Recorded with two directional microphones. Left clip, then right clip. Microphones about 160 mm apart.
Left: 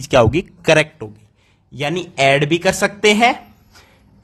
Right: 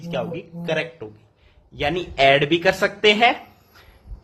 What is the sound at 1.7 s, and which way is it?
Speech, 40° left (ahead or behind).